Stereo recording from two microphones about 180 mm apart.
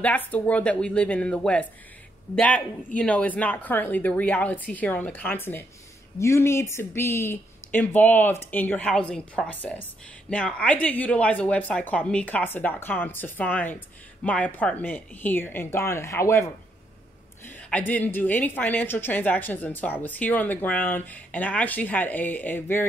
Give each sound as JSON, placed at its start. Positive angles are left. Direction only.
{"t": 0.0, "sound": "speech", "side_deg": 10}
{"t": 17.5, "sound": "speech", "side_deg": 5}